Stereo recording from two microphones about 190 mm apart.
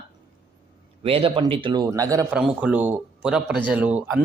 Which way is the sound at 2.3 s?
5° right (ahead or behind).